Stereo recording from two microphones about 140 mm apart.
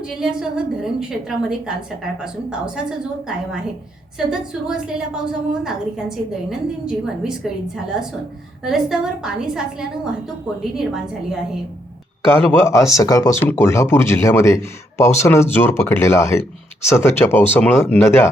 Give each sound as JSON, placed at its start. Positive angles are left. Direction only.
{"t": 0.0, "sound": "a woman's voice", "side_deg": -5}
{"t": 4.3, "sound": "a woman's voice", "side_deg": -5}
{"t": 12.5, "sound": "speech", "side_deg": 20}